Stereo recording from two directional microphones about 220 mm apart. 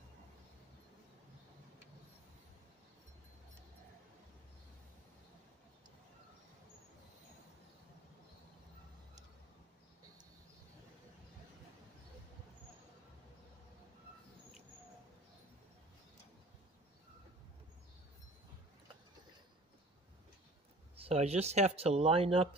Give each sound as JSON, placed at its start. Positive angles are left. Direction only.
{"t": 20.9, "sound": "speech", "side_deg": -25}